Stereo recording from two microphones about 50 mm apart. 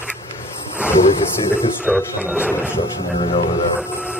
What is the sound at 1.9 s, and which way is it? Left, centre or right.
Speech, right.